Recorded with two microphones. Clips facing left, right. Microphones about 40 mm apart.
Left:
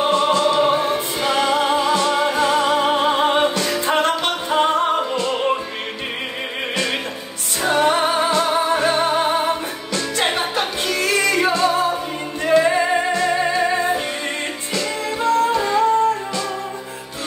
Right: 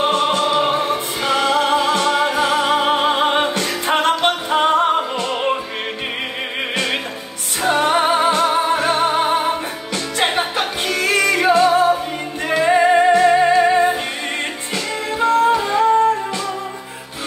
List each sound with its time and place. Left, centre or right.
0.1 s music: right
0.4 s music: centre
7.6 s music: centre